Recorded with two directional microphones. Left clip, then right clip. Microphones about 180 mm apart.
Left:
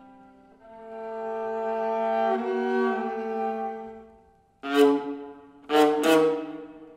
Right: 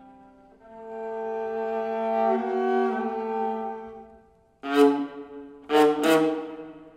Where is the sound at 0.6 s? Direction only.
5° left (ahead or behind).